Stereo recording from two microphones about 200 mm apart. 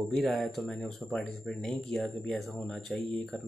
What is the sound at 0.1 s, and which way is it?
Speech, centre (ahead or behind).